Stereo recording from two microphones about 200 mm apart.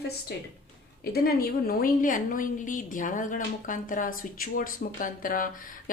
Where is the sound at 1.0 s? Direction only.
50° left (ahead or behind).